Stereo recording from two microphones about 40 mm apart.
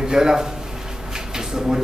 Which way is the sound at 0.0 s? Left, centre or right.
Centre.